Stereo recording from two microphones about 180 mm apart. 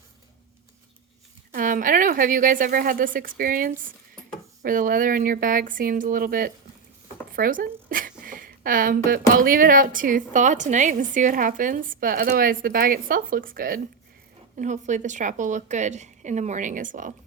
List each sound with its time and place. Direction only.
1.5 s a woman's voice: 50° right (ahead or behind)